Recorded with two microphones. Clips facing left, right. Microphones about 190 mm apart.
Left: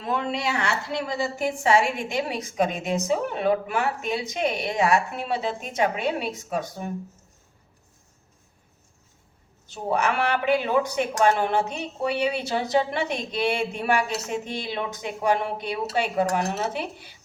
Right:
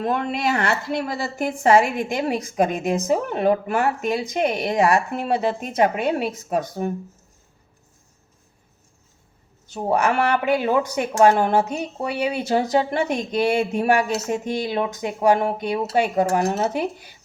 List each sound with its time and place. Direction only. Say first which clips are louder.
0.0 s speech: right 4 dB; 55° right (ahead or behind)
9.7 s speech: right 4 dB; 50° right (ahead or behind)